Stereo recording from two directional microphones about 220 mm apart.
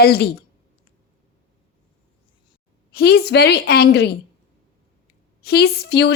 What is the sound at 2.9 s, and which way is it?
A woman's voice, 45° left (ahead or behind).